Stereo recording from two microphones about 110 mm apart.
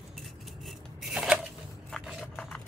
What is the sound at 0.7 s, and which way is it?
Rub, 5° right (ahead or behind).